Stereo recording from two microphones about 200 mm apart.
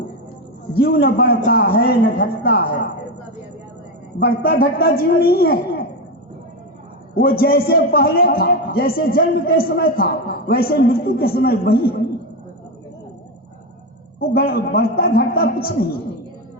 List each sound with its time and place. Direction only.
0.8 s a man's voice: 50° left (ahead or behind)
4.2 s a man's voice: 50° left (ahead or behind)
7.2 s a man's voice: 50° left (ahead or behind)
14.2 s a man's voice: 50° left (ahead or behind)